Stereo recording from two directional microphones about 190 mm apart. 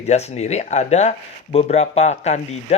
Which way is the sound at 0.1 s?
35° left (ahead or behind).